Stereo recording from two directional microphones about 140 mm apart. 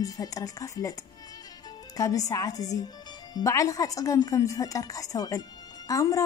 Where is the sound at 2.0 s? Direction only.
25° left (ahead or behind).